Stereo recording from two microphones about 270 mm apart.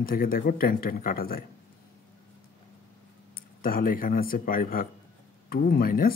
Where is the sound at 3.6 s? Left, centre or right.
Left.